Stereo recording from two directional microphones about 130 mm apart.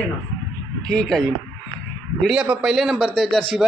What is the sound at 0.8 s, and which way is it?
Speech, 5° left (ahead or behind).